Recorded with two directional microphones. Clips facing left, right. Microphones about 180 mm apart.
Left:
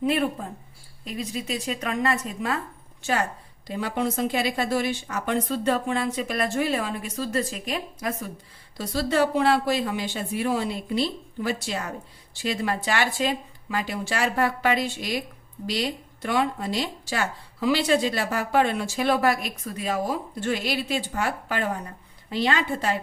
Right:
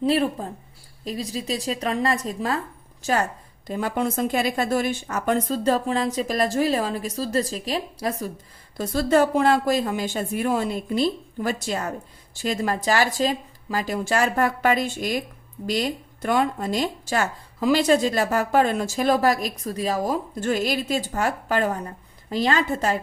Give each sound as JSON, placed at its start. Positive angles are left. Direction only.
{"t": 0.0, "sound": "a woman's voice", "side_deg": -35}
{"t": 8.8, "sound": "a woman's voice", "side_deg": -50}